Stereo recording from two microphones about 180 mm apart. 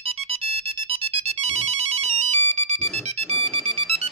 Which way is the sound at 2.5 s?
35° right (ahead or behind).